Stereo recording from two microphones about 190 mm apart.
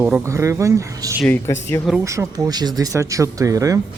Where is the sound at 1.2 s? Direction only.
10° left (ahead or behind).